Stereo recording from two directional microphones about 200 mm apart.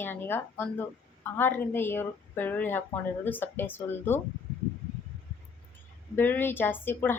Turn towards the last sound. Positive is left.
turn(degrees=10)  # may be behind; listen again after turning